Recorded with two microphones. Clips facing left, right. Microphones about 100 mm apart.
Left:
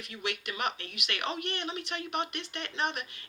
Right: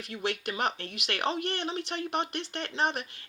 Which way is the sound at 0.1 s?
35° right (ahead or behind).